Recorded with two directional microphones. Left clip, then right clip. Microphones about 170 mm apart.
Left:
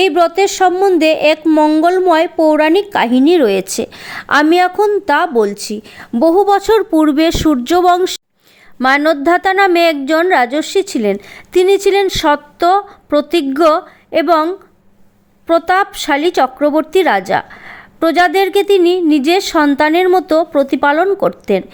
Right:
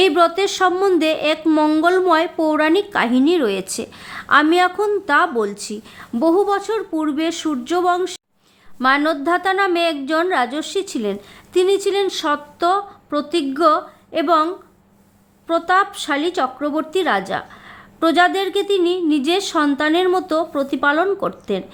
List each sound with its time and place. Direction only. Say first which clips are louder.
0.0 s a woman's voice: left 4 dB; 25° left (ahead or behind)
1.5 s a woman's voice: left 5 dB; 15° left (ahead or behind); by 8.2 s 45° left (ahead or behind)
8.8 s a woman's voice: left 5 dB; 30° left (ahead or behind)